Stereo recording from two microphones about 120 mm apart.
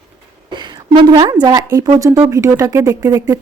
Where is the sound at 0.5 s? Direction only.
40° right (ahead or behind).